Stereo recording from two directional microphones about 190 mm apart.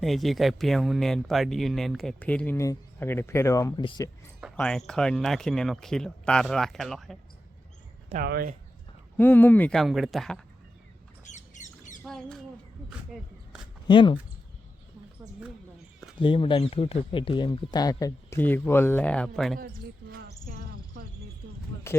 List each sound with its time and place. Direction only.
0.0 s speech: centre (ahead or behind); by 4.1 s 20° left (ahead or behind)
4.5 s speech: 5° left (ahead or behind)
8.1 s speech: 55° right (ahead or behind)
9.1 s speech: 10° left (ahead or behind)
11.3 s squawk: 40° left (ahead or behind)
12.0 s a sound: 5° left (ahead or behind)
13.8 s speech: 25° left (ahead or behind)
16.2 s speech: 25° left (ahead or behind); by 19.5 s 5° left (ahead or behind)
19.5 s a sound: 55° right (ahead or behind)